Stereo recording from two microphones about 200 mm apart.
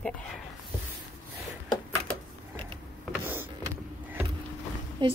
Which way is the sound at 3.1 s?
10° right (ahead or behind).